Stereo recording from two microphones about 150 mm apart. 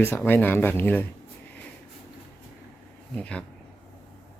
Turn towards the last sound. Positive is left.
turn(degrees=10)  # may be behind; listen again after turning